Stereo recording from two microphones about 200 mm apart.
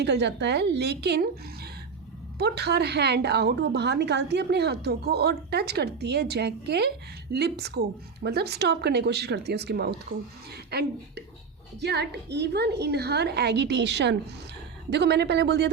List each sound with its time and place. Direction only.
0.0 s a woman's voice: 55° right (ahead or behind)
2.4 s a woman's voice: 55° right (ahead or behind)